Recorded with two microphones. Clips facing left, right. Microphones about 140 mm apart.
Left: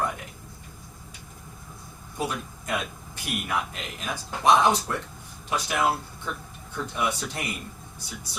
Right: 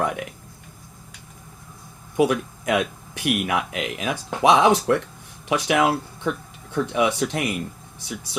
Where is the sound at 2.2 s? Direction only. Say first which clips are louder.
Right 11 dB; 85° right.